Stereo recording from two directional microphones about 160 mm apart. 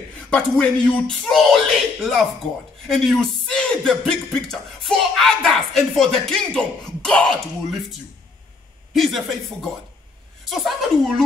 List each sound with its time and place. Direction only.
0.3 s speech: 5° left (ahead or behind)
8.9 s speech: centre (ahead or behind)
10.5 s speech: centre (ahead or behind)